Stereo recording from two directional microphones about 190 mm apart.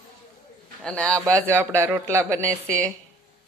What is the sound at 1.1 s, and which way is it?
Speech, 15° right (ahead or behind).